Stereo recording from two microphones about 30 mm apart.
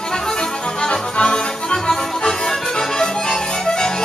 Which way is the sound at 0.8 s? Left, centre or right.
Left.